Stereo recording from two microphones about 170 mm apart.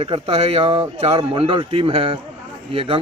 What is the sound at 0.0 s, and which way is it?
A man's voice, 35° right (ahead or behind).